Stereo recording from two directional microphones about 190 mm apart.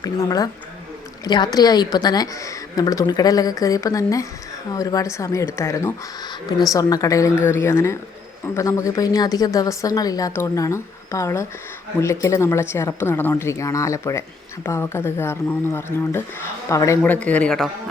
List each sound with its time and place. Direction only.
0.0 s a woman's voice: 20° left (ahead or behind); by 17.7 s 5° left (ahead or behind)